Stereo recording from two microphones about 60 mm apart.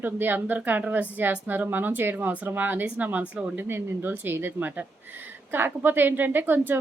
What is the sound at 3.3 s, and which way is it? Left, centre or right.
Speech, centre.